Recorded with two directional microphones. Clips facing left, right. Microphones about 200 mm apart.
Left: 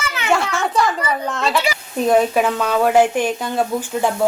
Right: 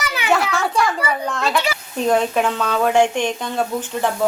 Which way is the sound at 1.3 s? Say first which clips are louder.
Left 1 dB; centre (ahead or behind).